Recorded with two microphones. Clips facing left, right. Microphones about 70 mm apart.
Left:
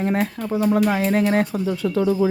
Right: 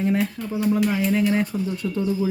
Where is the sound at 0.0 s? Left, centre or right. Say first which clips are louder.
Left 1 dB; left.